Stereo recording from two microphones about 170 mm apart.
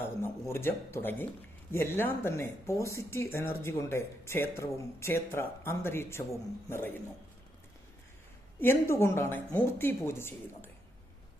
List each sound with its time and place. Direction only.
0.2 s speech: 15° left (ahead or behind)
8.5 s speech: 15° left (ahead or behind)